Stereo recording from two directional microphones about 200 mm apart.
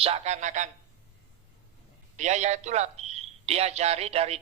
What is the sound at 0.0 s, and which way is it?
Speech, 30° right (ahead or behind).